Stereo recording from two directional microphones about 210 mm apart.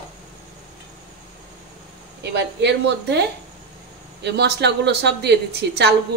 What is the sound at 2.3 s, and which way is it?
Speech, 55° right (ahead or behind).